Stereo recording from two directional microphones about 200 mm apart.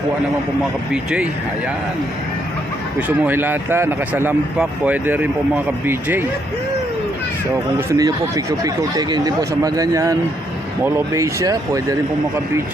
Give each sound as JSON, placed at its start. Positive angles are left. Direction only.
{"t": 0.9, "sound": "speech", "side_deg": -5}
{"t": 3.1, "sound": "speech", "side_deg": -10}
{"t": 7.5, "sound": "speech", "side_deg": -15}